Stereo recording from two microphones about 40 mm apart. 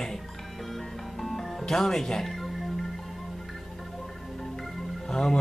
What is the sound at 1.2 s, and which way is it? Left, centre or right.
Music, centre.